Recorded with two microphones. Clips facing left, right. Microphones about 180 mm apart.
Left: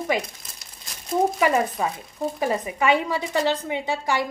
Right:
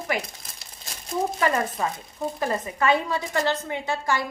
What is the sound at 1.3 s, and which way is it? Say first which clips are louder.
A woman's voice: left 3 dB; 15° left (ahead or behind).